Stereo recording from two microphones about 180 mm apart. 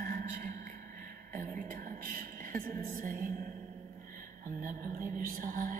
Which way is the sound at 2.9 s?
50° right (ahead or behind).